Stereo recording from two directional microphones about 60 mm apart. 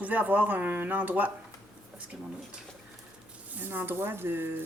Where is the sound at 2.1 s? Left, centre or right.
Centre.